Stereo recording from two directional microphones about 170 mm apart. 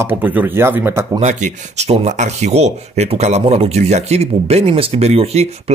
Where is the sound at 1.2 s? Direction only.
40° right (ahead or behind).